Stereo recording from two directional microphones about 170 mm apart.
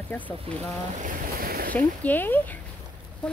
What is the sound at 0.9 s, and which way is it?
Boat, 50° right (ahead or behind).